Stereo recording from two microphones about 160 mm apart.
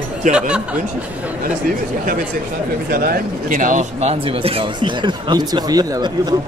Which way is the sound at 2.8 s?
65° right (ahead or behind).